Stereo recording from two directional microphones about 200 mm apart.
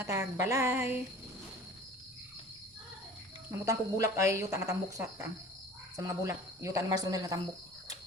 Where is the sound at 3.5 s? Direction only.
15° right (ahead or behind).